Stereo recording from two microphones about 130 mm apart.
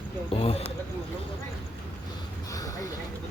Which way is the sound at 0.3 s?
50° left (ahead or behind).